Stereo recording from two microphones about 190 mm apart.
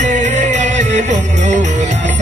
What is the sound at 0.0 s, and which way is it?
Music, 40° right (ahead or behind).